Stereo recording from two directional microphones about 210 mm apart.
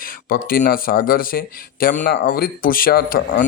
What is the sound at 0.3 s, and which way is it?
A man's voice, 45° left (ahead or behind).